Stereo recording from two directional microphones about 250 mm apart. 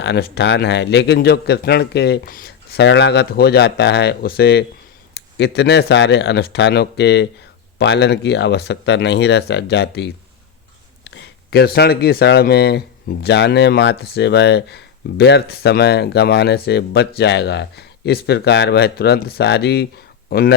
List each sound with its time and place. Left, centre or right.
0.0 s speech: left